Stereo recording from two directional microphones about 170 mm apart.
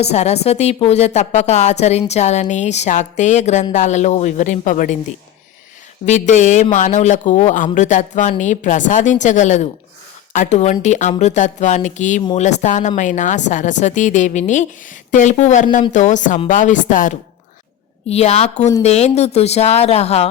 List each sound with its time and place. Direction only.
0.0 s a woman's voice: 40° left (ahead or behind)
6.1 s a woman's voice: 45° left (ahead or behind)
18.1 s speech: 40° left (ahead or behind)